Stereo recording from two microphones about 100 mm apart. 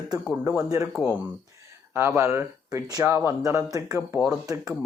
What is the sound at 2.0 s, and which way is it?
Speech, 25° right (ahead or behind).